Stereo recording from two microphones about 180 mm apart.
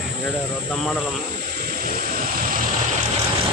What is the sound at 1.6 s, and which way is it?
Vehicle, 55° right (ahead or behind).